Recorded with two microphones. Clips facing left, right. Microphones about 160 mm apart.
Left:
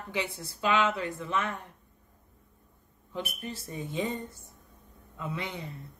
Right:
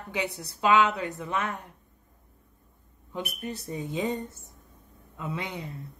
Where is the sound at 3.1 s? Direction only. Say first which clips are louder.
Right 2 dB; 20° right (ahead or behind).